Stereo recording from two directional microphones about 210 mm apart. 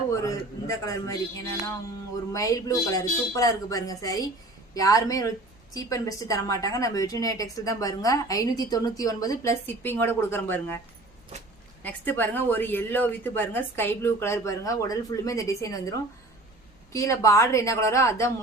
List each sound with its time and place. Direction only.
0.1 s a woman's voice: 15° left (ahead or behind)
2.3 s a woman's voice: 15° left (ahead or behind)
11.8 s a woman's voice: 10° left (ahead or behind)